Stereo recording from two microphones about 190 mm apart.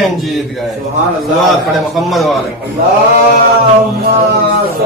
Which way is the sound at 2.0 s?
Centre (ahead or behind).